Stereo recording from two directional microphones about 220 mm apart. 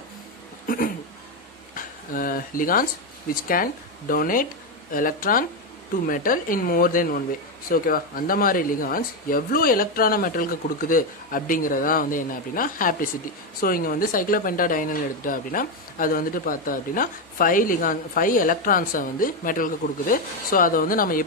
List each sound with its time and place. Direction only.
1.8 s speech: 40° left (ahead or behind)
4.1 s speech: 40° left (ahead or behind)